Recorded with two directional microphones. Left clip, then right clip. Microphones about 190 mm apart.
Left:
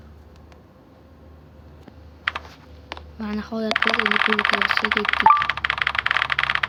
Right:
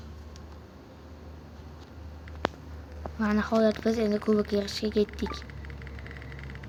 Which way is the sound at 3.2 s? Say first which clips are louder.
Right 4 dB; 5° right (ahead or behind).